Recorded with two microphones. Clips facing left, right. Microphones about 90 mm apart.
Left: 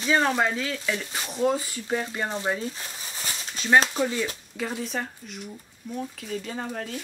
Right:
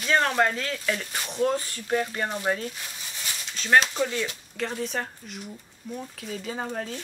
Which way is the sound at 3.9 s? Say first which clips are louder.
Left 1 dB; 5° left (ahead or behind).